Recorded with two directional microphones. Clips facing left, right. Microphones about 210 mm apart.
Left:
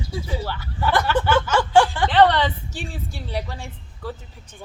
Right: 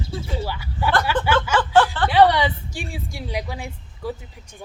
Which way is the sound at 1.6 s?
10° left (ahead or behind).